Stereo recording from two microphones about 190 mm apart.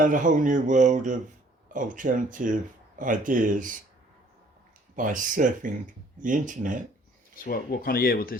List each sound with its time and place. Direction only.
0.0 s speech: 45° right (ahead or behind)
4.9 s speech: 45° right (ahead or behind)
7.4 s speech: 50° left (ahead or behind)